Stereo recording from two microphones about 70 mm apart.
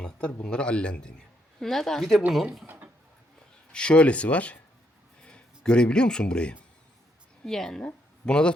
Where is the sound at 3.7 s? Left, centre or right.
Centre.